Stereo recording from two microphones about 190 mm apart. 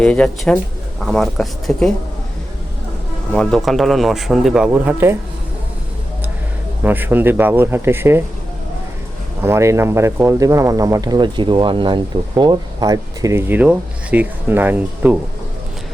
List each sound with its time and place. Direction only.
0.0 s speech: 5° left (ahead or behind)
3.3 s speech: 5° left (ahead or behind)
6.8 s speech: 10° right (ahead or behind)
9.4 s speech: 15° right (ahead or behind)